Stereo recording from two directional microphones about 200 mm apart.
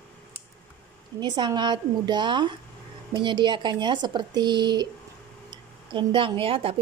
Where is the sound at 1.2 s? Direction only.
20° right (ahead or behind).